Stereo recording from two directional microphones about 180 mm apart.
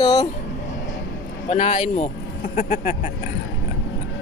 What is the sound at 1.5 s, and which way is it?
Speech, 40° left (ahead or behind).